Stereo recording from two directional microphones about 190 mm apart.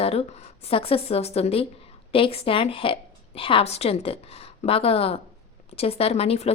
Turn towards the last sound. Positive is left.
turn(degrees=30)  # may be behind; listen again after turning